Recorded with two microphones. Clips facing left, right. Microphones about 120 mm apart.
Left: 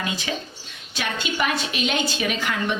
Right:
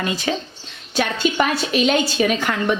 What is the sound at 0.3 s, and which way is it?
A woman's voice, 45° right (ahead or behind).